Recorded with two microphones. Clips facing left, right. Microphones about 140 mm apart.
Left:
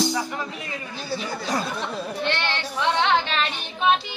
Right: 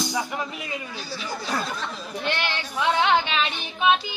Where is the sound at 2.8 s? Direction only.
5° right (ahead or behind).